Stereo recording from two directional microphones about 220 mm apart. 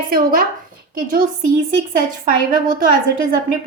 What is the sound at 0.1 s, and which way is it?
Speech, 40° right (ahead or behind).